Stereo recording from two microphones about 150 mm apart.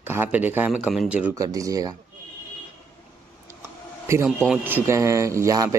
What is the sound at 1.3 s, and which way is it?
Speech, 25° right (ahead or behind).